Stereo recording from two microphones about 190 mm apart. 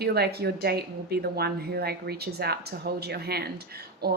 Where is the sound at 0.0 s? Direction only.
55° right (ahead or behind).